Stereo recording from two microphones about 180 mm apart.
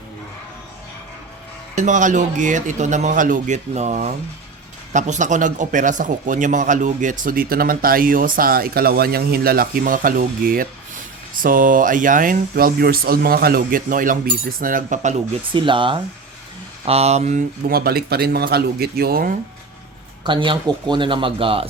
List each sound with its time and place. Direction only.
1.7 s a man's voice: 45° right (ahead or behind)
15.5 s speech: 30° right (ahead or behind)
17.7 s speech: 55° right (ahead or behind)
20.2 s speech: 25° right (ahead or behind)